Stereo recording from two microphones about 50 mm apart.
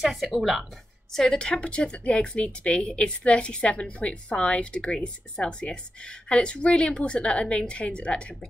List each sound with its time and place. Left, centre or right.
0.0 s speech: centre
1.1 s a woman's voice: centre